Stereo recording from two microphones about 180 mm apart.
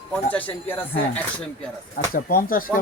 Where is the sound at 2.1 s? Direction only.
55° left (ahead or behind).